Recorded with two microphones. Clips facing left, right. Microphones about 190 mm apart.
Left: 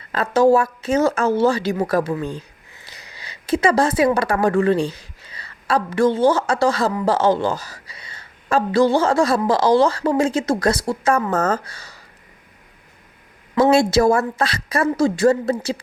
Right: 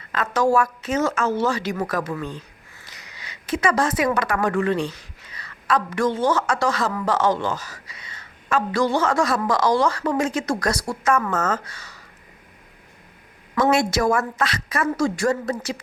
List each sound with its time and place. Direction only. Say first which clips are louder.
0.1 s a woman's voice: left 5 dB; 30° left (ahead or behind)
13.6 s a woman's voice: left 5 dB; 30° left (ahead or behind)